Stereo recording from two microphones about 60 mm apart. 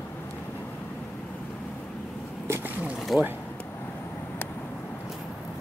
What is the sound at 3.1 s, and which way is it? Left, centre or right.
Speech, centre.